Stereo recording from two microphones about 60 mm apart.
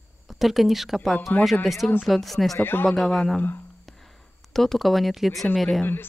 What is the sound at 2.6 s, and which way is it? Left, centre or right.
Speech, left.